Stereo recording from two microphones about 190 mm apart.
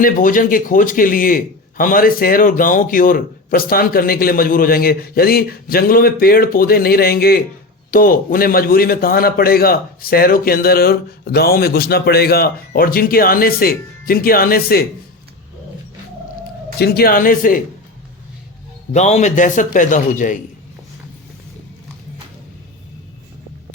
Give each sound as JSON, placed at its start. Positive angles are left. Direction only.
{"t": 0.0, "sound": "a man's voice", "side_deg": 45}
{"t": 16.7, "sound": "a man's voice", "side_deg": 55}
{"t": 18.9, "sound": "a man's voice", "side_deg": 35}